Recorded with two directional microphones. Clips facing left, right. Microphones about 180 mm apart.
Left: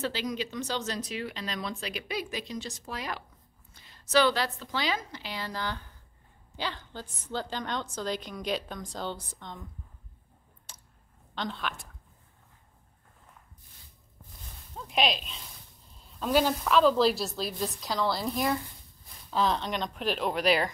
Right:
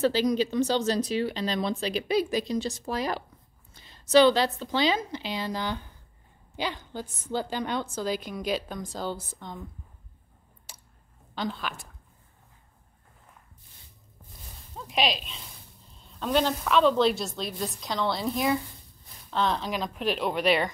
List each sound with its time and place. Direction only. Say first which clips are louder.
0.0 s a woman's voice: right 9 dB; 35° right (ahead or behind); by 9.6 s 5° right (ahead or behind)
10.7 s a sound: right 2 dB; 10° right (ahead or behind)
11.3 s a woman's voice: right 2 dB; 5° right (ahead or behind)
14.8 s a woman's voice: right 1 dB; centre (ahead or behind)